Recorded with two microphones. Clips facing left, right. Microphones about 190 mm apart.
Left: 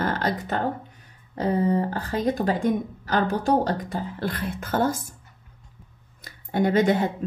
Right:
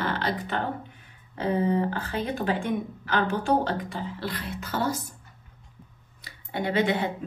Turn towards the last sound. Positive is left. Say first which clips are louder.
# left 5 dB
turn(degrees=45)  # may be behind; listen again after turning